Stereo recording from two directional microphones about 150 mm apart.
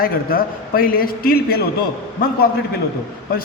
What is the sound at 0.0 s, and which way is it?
A man's voice, 75° left (ahead or behind).